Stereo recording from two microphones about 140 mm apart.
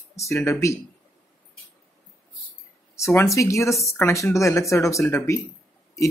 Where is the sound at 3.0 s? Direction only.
20° left (ahead or behind).